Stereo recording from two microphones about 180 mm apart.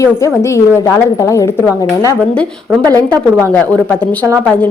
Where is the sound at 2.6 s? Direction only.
20° right (ahead or behind).